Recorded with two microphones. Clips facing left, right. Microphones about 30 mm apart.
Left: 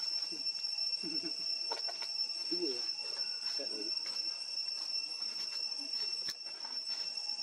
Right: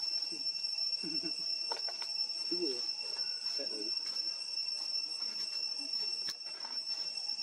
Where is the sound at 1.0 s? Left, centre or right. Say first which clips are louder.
Right 1 dB; centre.